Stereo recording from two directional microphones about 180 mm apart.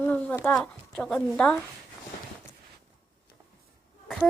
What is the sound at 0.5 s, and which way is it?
A woman's voice, 5° left (ahead or behind).